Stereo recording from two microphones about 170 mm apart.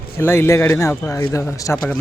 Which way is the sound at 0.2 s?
15° left (ahead or behind).